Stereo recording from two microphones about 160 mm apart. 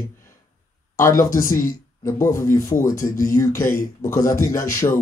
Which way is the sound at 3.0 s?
60° left (ahead or behind).